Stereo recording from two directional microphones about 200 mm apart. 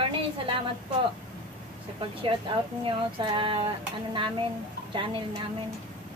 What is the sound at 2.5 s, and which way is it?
Speech, 25° right (ahead or behind).